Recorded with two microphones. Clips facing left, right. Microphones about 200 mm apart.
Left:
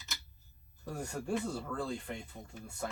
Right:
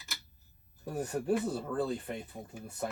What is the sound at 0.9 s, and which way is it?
Speech, 20° right (ahead or behind).